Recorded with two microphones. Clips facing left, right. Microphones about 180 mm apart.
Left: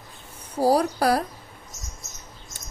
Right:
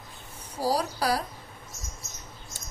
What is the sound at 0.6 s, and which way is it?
Speech, 55° left (ahead or behind).